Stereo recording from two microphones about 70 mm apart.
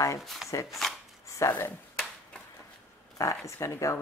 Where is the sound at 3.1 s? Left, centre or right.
Left.